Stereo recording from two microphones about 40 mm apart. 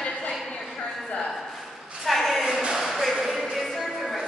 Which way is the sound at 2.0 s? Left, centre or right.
Centre.